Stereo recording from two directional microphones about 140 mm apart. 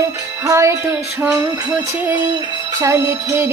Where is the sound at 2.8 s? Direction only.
20° right (ahead or behind).